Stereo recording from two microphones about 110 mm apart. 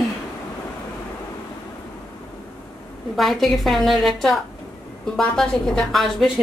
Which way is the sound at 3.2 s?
Centre (ahead or behind).